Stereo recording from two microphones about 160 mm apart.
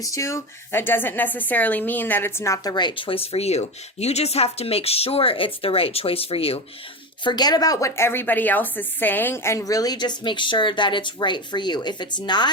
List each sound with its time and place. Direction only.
0.0 s speech: 20° left (ahead or behind); by 6.6 s 35° left (ahead or behind)
7.3 s a woman's voice: 25° left (ahead or behind)